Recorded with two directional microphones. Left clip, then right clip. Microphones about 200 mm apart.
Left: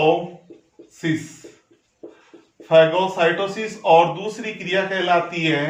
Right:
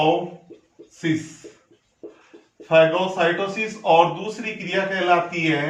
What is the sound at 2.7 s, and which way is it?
Speech, 5° right (ahead or behind).